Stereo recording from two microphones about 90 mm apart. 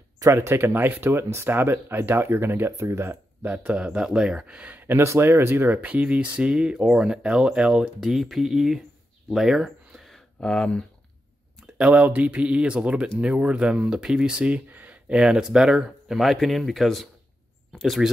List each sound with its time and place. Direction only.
0.3 s speech: 30° right (ahead or behind); by 10.9 s 10° left (ahead or behind)
11.6 s speech: 15° right (ahead or behind)